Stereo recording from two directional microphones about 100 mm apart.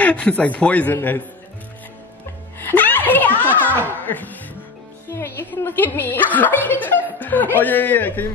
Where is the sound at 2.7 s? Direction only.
20° left (ahead or behind).